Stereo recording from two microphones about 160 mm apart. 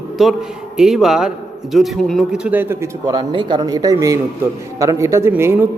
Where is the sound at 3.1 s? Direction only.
30° right (ahead or behind).